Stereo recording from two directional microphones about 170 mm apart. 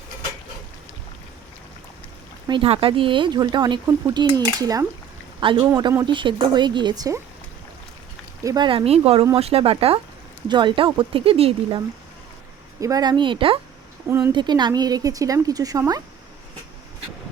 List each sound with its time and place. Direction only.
2.5 s speech: 30° right (ahead or behind)
8.4 s speech: 25° right (ahead or behind)
12.8 s speech: 25° right (ahead or behind)
14.1 s speech: 15° right (ahead or behind)
14.3 s speech: 25° right (ahead or behind)